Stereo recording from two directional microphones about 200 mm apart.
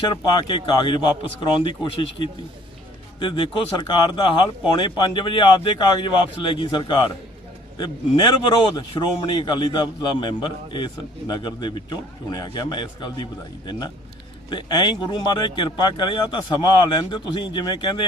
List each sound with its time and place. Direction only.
0.0 s speech: 20° left (ahead or behind)
3.2 s speech: 25° left (ahead or behind)